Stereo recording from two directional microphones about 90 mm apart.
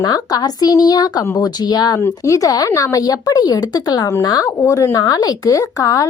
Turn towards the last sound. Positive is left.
turn(degrees=40)  # may be behind; listen again after turning